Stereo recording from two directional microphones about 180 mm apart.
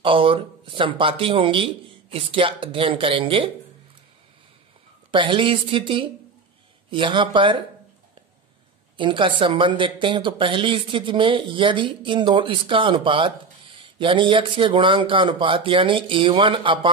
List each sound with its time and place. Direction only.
0.0 s speech: 30° right (ahead or behind)
5.1 s speech: 30° right (ahead or behind)
8.9 s speech: 25° right (ahead or behind)